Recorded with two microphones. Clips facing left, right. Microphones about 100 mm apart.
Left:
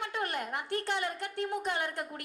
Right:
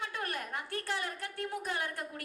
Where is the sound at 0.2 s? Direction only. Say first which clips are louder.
Left 6 dB; 20° left (ahead or behind).